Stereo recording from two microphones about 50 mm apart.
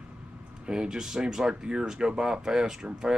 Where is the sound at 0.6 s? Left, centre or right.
Centre.